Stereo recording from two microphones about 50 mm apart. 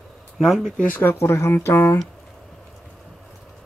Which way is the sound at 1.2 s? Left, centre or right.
Left.